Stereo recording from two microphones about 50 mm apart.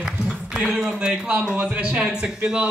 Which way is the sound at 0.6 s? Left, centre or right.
Centre.